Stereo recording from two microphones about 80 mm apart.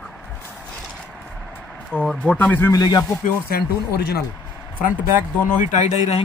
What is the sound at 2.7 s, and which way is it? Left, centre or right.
Speech, left.